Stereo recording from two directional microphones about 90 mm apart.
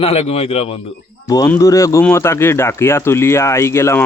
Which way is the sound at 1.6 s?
35° left (ahead or behind).